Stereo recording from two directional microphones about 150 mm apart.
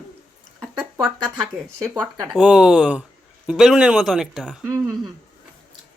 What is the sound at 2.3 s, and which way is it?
Speech, 5° right (ahead or behind).